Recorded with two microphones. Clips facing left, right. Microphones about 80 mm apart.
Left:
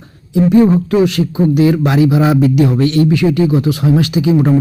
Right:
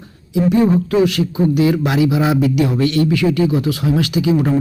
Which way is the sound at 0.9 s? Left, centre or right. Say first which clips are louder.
Left 2 dB; left.